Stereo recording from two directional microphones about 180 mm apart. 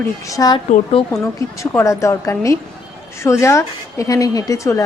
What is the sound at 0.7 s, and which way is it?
Speech, 35° left (ahead or behind).